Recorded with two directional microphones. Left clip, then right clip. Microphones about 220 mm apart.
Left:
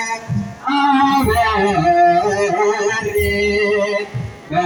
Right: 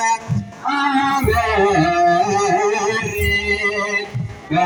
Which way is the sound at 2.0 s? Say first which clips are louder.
Left 1 dB; 20° right (ahead or behind).